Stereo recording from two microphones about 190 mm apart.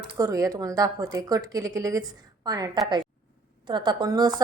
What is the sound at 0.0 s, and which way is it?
A woman's voice, 20° right (ahead or behind).